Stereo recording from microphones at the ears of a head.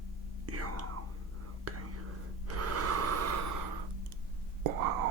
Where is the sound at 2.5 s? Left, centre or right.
Right.